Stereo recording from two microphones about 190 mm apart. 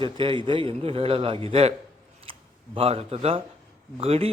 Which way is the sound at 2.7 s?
30° right (ahead or behind).